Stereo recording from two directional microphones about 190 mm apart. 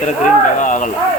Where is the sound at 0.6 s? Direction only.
40° left (ahead or behind).